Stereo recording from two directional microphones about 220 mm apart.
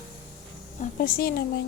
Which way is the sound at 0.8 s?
40° left (ahead or behind).